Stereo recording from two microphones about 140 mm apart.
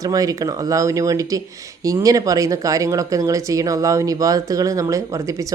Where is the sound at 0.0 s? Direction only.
25° right (ahead or behind).